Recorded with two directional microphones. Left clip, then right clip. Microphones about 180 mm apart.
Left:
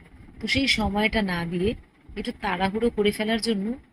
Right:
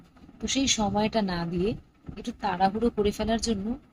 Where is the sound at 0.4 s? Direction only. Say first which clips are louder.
Left 3 dB; 15° left (ahead or behind).